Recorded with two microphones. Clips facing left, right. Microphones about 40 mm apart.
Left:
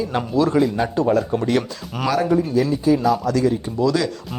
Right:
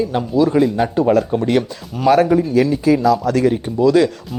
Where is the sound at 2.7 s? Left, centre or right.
Right.